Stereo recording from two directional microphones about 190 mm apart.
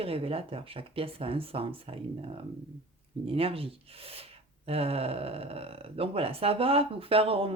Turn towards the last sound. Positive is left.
turn(degrees=-30)  # may be behind; listen again after turning